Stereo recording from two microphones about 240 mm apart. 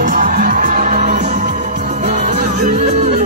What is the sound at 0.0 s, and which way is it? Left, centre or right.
Music, right.